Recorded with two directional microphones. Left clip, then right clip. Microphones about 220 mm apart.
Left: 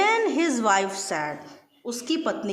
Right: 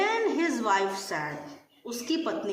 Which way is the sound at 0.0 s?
50° left (ahead or behind).